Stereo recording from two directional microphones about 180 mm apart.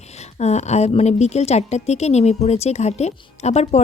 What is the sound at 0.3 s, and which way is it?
A woman's voice, 40° left (ahead or behind).